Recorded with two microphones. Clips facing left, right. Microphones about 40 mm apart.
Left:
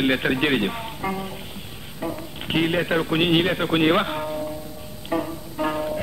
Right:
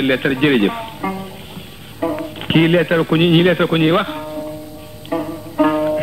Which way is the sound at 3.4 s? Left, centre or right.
Right.